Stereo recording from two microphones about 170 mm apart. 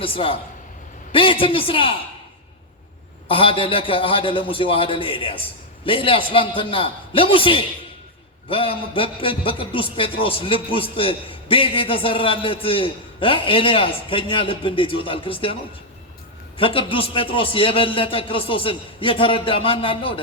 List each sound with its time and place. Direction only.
0.0 s a man's voice: 30° left (ahead or behind)
3.2 s a man's voice: 30° left (ahead or behind)
16.6 s a man's voice: 30° left (ahead or behind)